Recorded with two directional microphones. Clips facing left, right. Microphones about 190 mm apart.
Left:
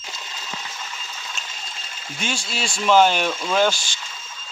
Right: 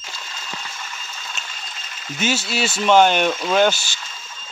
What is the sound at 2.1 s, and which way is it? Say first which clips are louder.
Speech: right 6 dB; 5° right (ahead or behind).